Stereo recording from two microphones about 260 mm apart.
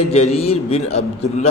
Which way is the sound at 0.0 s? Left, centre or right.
Left.